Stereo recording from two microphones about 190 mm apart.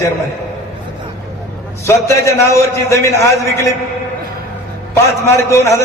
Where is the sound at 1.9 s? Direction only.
15° left (ahead or behind).